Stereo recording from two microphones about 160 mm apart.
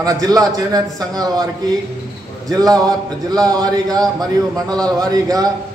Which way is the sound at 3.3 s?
25° right (ahead or behind).